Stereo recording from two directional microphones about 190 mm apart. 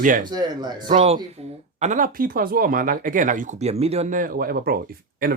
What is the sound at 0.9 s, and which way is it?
Speech, 35° right (ahead or behind).